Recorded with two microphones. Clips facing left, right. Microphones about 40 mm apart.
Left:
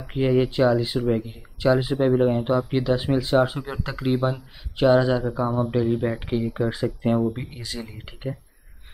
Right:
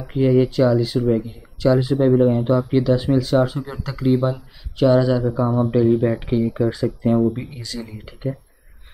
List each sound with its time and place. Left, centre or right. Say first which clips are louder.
0.0 s speech: right 4 dB; centre
5.2 s speech: right 4 dB; centre
6.5 s speech: right 4 dB; centre